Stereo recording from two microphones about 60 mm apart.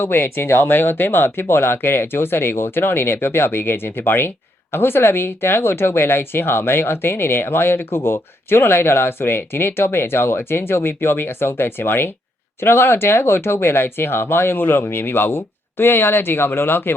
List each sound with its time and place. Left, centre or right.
0.0 s speech: left